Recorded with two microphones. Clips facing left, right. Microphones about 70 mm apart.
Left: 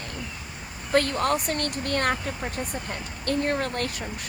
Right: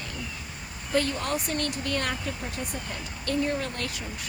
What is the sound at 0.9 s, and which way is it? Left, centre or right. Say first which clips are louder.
Speech: left 4 dB; left.